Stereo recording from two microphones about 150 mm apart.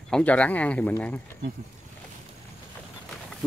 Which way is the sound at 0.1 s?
10° left (ahead or behind).